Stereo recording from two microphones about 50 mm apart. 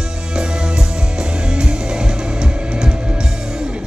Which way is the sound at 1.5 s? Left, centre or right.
Centre.